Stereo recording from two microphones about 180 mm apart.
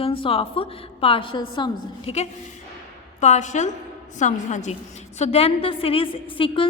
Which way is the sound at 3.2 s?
40° left (ahead or behind).